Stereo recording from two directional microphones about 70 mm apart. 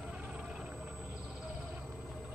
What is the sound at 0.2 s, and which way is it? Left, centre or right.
Whale vocalization, centre.